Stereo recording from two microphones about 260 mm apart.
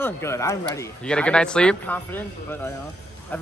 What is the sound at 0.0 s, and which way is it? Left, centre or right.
Speech, centre.